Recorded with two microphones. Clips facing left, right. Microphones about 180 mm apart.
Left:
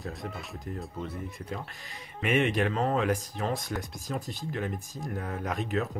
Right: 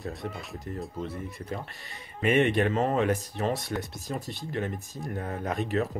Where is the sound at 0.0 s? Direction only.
Centre (ahead or behind).